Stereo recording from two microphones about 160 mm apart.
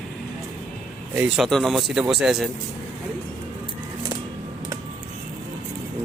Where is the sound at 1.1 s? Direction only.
10° right (ahead or behind).